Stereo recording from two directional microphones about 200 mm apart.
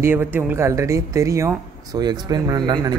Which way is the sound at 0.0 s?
10° right (ahead or behind).